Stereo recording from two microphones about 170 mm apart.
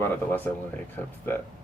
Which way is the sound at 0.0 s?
10° left (ahead or behind).